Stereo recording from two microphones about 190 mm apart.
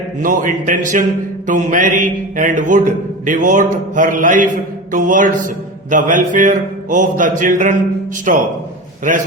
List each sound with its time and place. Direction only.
0.2 s a man's voice: 45° right (ahead or behind)